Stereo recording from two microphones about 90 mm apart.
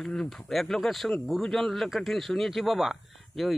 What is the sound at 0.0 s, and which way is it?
Speech, 10° left (ahead or behind).